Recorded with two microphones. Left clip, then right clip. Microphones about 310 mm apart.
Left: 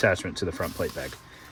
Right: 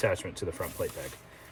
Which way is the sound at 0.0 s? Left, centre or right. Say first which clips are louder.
Left 6 dB; left.